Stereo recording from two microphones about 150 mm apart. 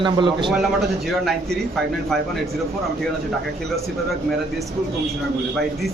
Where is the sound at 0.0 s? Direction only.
30° right (ahead or behind).